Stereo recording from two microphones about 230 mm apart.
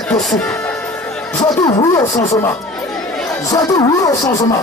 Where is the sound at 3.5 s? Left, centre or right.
Centre.